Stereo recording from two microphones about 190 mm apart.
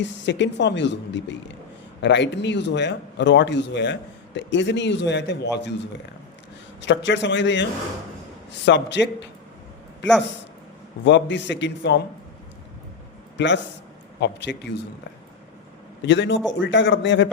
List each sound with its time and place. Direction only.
0.0 s a man's voice: 70° left (ahead or behind)
6.8 s a man's voice: 70° left (ahead or behind)
13.3 s a man's voice: 70° left (ahead or behind)
16.0 s a man's voice: 70° left (ahead or behind)